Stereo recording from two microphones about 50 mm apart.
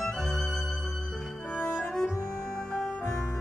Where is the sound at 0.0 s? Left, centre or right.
Centre.